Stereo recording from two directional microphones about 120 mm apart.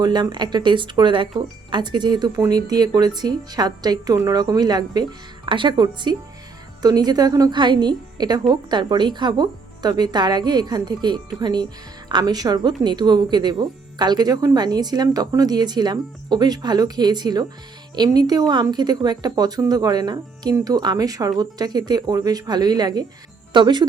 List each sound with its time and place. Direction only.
0.0 s a woman's voice: 35° right (ahead or behind)